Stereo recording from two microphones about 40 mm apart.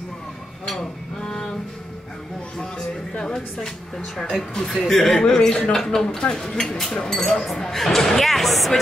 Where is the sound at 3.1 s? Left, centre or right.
Centre.